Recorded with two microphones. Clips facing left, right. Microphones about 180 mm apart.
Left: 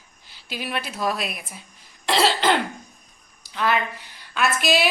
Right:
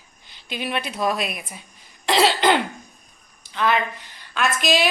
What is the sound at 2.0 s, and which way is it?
Cough, centre (ahead or behind).